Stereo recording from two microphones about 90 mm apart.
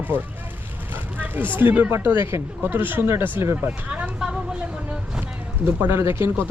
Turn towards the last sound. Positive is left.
turn(degrees=-30)  # may be behind; listen again after turning